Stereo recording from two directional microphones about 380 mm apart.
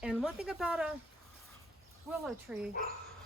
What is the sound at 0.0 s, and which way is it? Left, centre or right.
Speech, centre.